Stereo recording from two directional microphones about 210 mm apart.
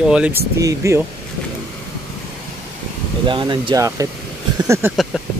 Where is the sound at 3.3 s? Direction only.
25° right (ahead or behind).